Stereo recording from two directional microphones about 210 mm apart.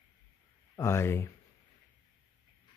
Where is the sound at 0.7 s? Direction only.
15° left (ahead or behind).